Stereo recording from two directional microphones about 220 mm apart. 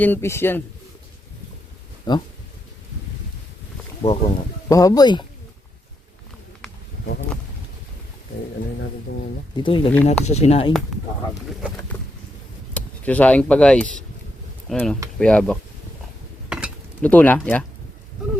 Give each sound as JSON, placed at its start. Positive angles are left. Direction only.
{"t": 0.0, "sound": "speech", "side_deg": 10}
{"t": 2.1, "sound": "speech", "side_deg": 20}
{"t": 4.0, "sound": "speech", "side_deg": 25}
{"t": 9.6, "sound": "speech", "side_deg": 25}
{"t": 11.6, "sound": "speech", "side_deg": -5}
{"t": 12.7, "sound": "speech", "side_deg": 5}
{"t": 16.5, "sound": "mechanisms", "side_deg": -5}
{"t": 17.0, "sound": "speech", "side_deg": 5}